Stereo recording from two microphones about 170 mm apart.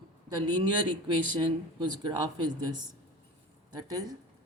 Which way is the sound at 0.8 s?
25° right (ahead or behind).